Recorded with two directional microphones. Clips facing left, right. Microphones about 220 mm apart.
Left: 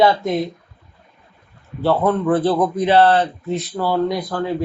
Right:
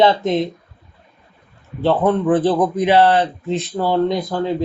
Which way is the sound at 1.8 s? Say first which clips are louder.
Right 1 dB; 15° right (ahead or behind).